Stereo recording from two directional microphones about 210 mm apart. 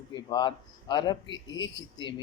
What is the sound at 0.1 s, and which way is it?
Speech, 20° left (ahead or behind).